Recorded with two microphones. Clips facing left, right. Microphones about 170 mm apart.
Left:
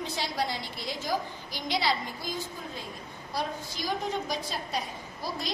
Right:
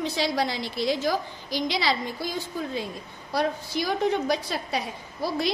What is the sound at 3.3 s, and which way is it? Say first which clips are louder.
A woman's voice: right 7 dB; 70° right (ahead or behind).